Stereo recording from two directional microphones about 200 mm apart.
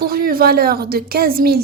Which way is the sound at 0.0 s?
45° right (ahead or behind).